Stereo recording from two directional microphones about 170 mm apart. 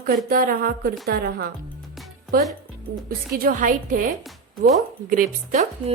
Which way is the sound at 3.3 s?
55° right (ahead or behind).